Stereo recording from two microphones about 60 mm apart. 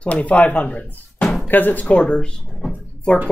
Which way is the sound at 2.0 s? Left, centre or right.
Centre.